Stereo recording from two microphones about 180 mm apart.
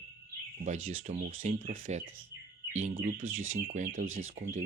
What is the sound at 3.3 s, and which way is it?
Speech, 90° right.